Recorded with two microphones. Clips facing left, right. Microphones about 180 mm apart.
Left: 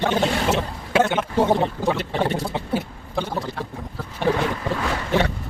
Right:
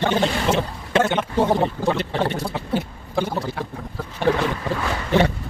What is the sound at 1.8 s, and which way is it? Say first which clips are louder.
Boat: right 1 dB; 10° left (ahead or behind).